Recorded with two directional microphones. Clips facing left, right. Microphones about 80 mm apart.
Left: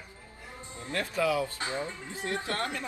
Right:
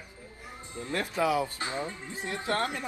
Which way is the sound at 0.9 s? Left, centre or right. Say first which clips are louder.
Right 1 dB; right.